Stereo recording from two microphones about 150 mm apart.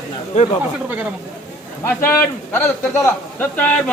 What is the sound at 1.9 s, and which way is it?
A man's voice, 15° left (ahead or behind).